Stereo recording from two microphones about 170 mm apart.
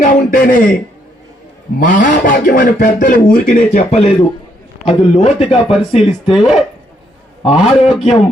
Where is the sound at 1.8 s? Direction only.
50° left (ahead or behind).